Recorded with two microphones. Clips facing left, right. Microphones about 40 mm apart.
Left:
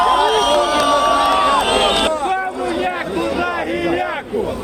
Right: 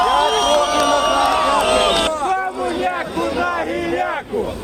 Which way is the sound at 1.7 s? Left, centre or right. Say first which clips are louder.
Even; left.